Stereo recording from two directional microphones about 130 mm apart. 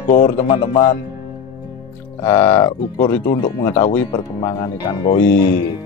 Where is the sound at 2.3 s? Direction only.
20° left (ahead or behind).